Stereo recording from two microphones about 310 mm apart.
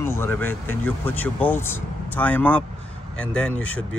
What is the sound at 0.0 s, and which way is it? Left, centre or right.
Speech, centre.